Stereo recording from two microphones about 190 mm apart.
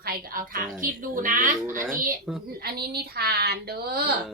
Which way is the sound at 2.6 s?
55° right (ahead or behind).